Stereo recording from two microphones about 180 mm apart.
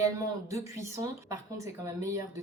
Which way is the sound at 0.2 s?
15° right (ahead or behind).